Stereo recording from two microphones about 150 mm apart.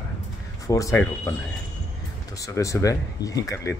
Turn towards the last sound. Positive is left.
turn(degrees=20)  # may be behind; listen again after turning